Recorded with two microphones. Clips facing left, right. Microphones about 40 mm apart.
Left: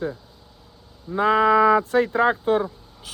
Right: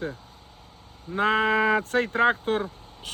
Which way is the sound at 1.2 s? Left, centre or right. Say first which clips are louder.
Left 5 dB; right.